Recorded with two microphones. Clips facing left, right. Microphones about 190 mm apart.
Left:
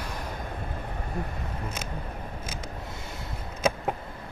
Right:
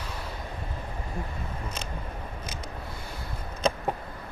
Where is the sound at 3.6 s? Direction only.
5° left (ahead or behind).